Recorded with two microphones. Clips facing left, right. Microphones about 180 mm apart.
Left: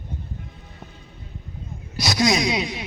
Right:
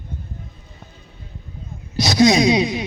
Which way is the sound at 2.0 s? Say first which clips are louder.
Right 7 dB; 25° right (ahead or behind).